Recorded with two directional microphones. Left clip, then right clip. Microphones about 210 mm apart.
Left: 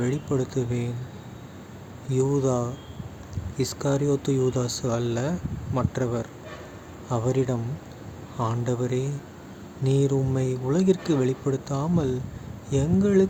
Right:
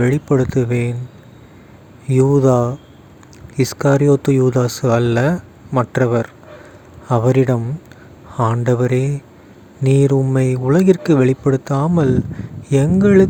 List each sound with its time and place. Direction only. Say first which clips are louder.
0.0 s speech: right 11 dB; 40° right (ahead or behind)
2.0 s speech: right 11 dB; 35° right (ahead or behind)